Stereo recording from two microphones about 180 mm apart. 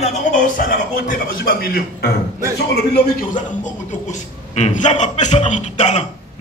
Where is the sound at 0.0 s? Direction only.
50° left (ahead or behind); by 3.3 s 65° left (ahead or behind).